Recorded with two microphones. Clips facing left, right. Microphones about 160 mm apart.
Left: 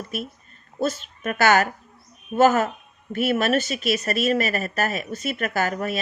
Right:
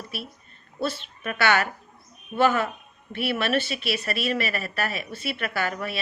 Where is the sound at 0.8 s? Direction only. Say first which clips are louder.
Left 4 dB; 45° left (ahead or behind).